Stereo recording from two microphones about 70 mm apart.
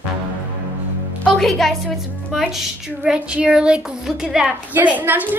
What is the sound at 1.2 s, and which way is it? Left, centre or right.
A woman's voice, centre.